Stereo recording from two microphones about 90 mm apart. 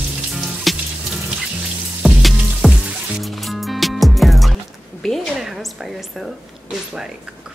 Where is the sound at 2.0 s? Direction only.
5° right (ahead or behind).